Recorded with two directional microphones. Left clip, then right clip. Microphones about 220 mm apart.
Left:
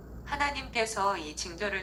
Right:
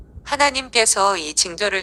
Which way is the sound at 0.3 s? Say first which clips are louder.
Right 13 dB; 40° right (ahead or behind).